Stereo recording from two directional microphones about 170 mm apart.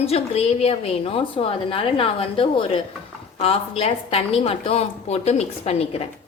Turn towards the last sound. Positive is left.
turn(degrees=40)  # may be behind; listen again after turning